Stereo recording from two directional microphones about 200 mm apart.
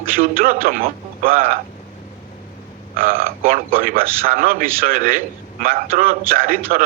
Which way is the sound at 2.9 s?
45° right (ahead or behind).